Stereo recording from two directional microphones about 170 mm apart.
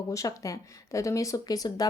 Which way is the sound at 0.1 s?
20° left (ahead or behind).